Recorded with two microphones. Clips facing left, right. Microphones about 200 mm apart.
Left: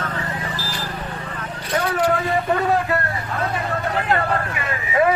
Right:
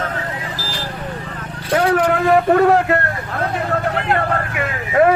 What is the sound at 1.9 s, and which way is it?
Vehicle, 75° right (ahead or behind).